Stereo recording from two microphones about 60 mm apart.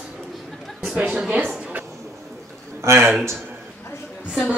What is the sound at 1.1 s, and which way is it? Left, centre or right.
Speech, centre.